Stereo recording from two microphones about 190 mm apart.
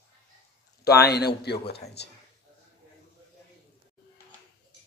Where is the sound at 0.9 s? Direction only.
55° left (ahead or behind).